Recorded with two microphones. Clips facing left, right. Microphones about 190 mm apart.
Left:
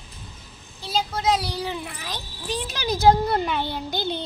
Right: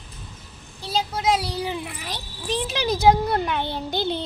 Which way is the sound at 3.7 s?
25° right (ahead or behind).